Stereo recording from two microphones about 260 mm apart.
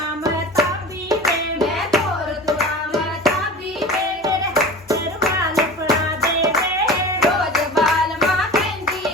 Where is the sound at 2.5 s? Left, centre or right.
Centre.